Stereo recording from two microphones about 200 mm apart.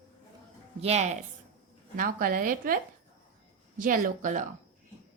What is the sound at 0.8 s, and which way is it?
A woman's voice, 35° right (ahead or behind).